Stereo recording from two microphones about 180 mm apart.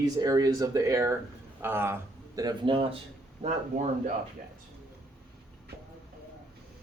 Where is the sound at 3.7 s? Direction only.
40° right (ahead or behind).